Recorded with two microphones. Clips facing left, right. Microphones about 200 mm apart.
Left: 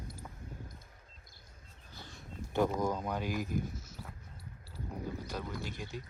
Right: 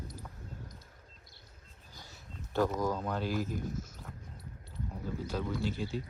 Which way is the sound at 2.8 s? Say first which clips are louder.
Right 1 dB; 15° left (ahead or behind).